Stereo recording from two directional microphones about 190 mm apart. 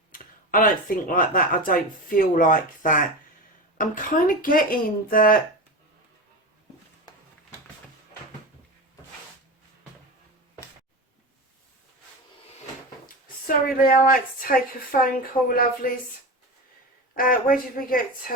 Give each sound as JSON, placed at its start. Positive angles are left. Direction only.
{"t": 0.1, "sound": "speech", "side_deg": 45}
{"t": 13.1, "sound": "speech", "side_deg": 50}
{"t": 17.2, "sound": "speech", "side_deg": 45}